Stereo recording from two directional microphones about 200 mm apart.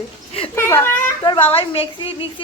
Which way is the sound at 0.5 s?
10° left (ahead or behind).